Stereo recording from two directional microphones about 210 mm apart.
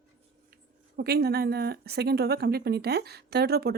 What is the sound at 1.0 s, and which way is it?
A woman's voice, 50° right (ahead or behind).